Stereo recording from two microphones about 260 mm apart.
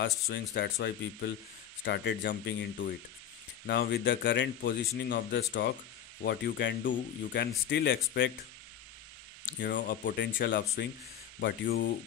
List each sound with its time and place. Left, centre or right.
0.3 s speech: left
9.6 s speech: left